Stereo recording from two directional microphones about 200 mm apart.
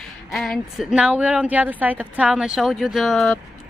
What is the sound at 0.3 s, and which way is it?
A woman's voice, centre (ahead or behind).